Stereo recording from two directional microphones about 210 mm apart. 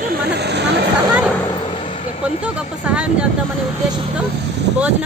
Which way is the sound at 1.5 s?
20° left (ahead or behind).